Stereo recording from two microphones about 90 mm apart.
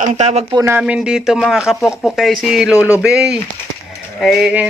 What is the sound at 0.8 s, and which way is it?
Speech, 10° right (ahead or behind).